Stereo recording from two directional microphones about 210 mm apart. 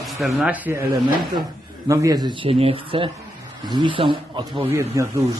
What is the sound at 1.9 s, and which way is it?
Speech, 15° right (ahead or behind).